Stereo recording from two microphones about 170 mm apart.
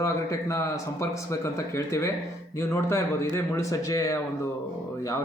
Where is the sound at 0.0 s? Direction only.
20° left (ahead or behind).